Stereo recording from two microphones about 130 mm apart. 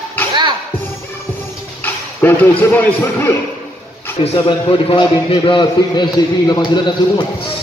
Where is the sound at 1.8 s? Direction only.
15° left (ahead or behind).